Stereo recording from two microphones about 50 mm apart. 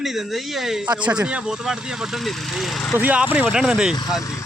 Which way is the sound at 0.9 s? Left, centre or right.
Right.